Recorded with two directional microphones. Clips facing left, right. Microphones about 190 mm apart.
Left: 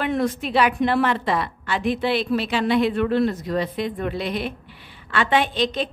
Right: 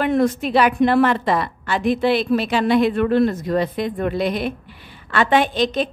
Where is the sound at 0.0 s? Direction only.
45° right (ahead or behind).